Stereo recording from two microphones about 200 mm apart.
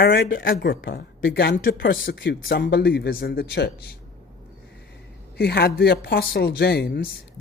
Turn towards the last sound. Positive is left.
turn(degrees=50)  # may be behind; listen again after turning